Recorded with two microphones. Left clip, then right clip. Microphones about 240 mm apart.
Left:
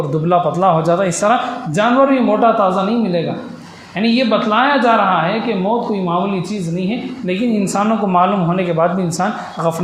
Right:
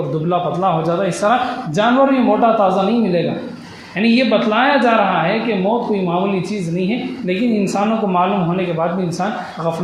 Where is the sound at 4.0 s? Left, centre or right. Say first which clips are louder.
Even; left.